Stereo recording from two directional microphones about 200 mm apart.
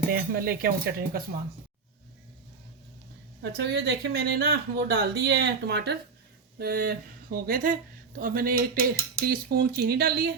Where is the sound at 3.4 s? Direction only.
55° right (ahead or behind).